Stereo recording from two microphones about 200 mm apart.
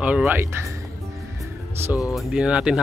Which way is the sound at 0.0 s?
5° right (ahead or behind).